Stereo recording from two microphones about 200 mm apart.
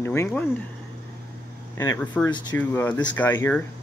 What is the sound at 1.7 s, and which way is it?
Speech, 15° left (ahead or behind).